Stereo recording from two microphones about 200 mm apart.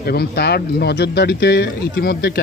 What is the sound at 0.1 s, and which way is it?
Speech, 50° left (ahead or behind).